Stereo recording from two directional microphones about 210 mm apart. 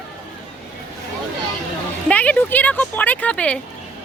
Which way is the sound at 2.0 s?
5° left (ahead or behind).